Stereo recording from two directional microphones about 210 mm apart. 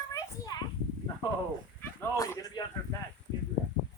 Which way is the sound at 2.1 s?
15° left (ahead or behind).